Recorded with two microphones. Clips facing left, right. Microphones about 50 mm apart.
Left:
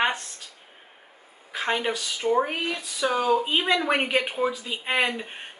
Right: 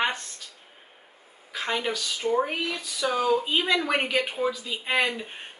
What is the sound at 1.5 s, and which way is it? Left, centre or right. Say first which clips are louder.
Speech: left 2 dB; left.